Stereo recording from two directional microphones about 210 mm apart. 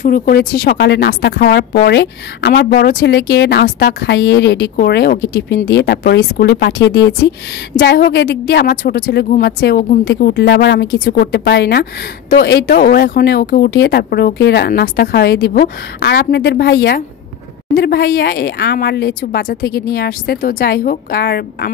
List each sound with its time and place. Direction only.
0.0 s speech: 40° left (ahead or behind)
0.7 s a woman's voice: 55° left (ahead or behind)